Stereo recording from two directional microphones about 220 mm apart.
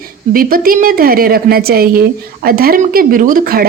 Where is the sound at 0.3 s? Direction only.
40° right (ahead or behind).